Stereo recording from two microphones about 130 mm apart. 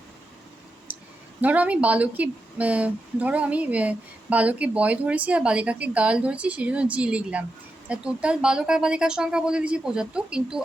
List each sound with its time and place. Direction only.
0.9 s clicking: 15° right (ahead or behind)
1.4 s speech: 10° right (ahead or behind)